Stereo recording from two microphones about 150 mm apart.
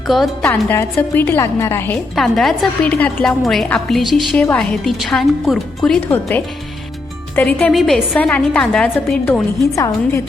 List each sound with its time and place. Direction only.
0.1 s speech: centre (ahead or behind)
0.4 s a woman's voice: 15° left (ahead or behind)
2.1 s a woman's voice: centre (ahead or behind)
7.7 s a woman's voice: centre (ahead or behind)
9.7 s a woman's voice: 20° left (ahead or behind)